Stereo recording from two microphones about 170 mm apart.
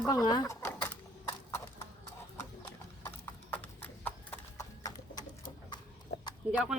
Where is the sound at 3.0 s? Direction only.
15° left (ahead or behind).